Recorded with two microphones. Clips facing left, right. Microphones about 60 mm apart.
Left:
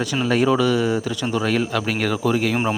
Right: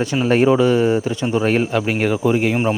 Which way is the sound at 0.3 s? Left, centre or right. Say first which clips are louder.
Right 4 dB; right.